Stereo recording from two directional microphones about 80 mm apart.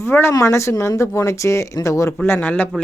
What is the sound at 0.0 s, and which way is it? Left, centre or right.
Speech, left.